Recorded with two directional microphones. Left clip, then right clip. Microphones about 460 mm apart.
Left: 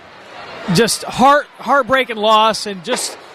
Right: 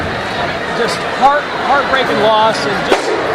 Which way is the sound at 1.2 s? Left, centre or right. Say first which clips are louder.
Even; left.